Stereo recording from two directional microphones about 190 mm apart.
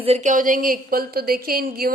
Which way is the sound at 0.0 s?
35° right (ahead or behind).